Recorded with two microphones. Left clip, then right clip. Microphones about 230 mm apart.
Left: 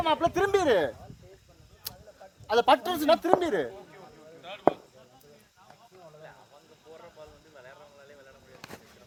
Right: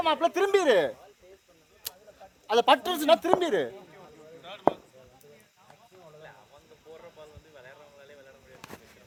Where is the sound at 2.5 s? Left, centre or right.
Right.